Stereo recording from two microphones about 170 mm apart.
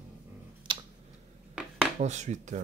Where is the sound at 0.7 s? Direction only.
30° right (ahead or behind).